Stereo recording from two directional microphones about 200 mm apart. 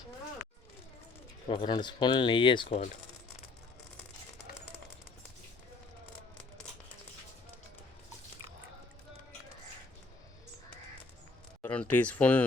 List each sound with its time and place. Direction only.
1.5 s speech: 25° left (ahead or behind)
11.6 s speech: 5° left (ahead or behind)